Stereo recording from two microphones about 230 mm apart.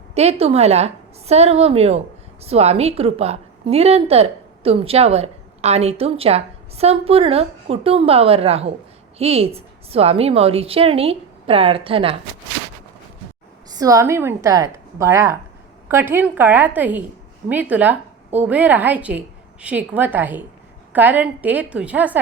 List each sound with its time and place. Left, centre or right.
0.1 s a woman's voice: right
13.7 s a woman's voice: centre